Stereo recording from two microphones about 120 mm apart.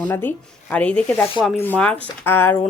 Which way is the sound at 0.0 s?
15° left (ahead or behind).